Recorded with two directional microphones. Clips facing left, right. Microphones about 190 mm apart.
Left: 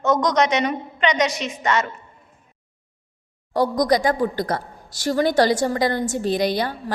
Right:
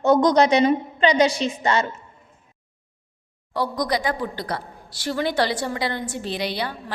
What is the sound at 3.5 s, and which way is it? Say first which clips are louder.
A woman's voice: left 5 dB; 45° left (ahead or behind).